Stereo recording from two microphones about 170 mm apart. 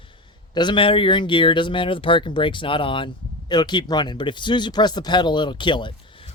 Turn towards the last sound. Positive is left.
turn(degrees=30)  # may be behind; listen again after turning